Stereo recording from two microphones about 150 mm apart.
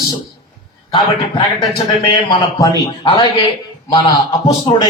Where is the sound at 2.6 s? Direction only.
30° left (ahead or behind).